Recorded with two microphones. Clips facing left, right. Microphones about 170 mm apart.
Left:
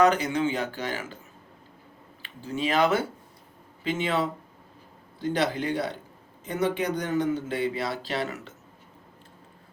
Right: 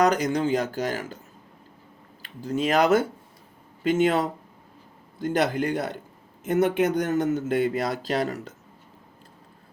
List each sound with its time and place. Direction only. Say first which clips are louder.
0.0 s speech: even; 40° right (ahead or behind)
2.2 s a man's voice: right 4 dB; 40° right (ahead or behind)